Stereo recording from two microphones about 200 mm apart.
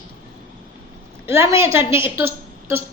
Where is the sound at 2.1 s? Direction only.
10° right (ahead or behind).